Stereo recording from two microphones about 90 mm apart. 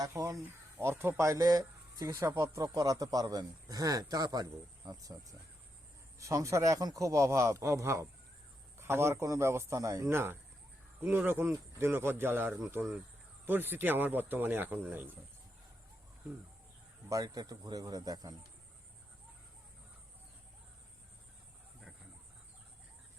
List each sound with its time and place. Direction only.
0.0 s a man's voice: 35° right (ahead or behind)
1.3 s speech: 45° right (ahead or behind)
2.2 s a man's voice: 30° right (ahead or behind)
17.1 s speech: 45° right (ahead or behind)